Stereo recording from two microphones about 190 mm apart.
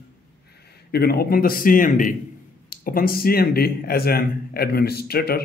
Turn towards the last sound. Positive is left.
turn(degrees=55)  # may be behind; listen again after turning